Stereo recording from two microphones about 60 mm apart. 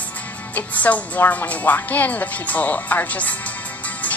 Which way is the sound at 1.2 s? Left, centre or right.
Left.